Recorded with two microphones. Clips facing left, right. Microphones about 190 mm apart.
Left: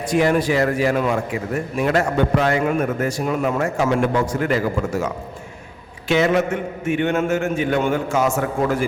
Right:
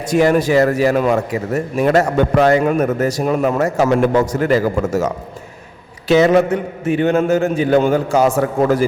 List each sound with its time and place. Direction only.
0.0 s a man's voice: 40° right (ahead or behind)